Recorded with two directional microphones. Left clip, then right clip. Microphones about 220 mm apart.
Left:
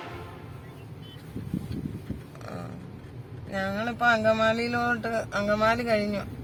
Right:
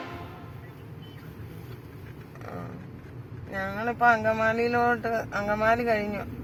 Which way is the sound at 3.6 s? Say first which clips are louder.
Right 1 dB; 40° left (ahead or behind).